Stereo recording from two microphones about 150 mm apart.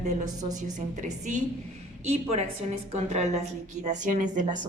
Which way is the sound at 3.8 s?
55° right (ahead or behind).